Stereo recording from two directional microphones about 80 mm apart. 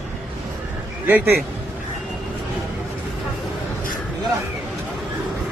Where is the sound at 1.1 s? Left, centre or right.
Right.